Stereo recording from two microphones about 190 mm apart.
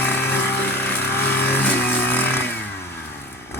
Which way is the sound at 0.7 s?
10° left (ahead or behind).